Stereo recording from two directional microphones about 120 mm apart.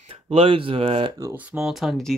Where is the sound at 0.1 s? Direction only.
50° right (ahead or behind).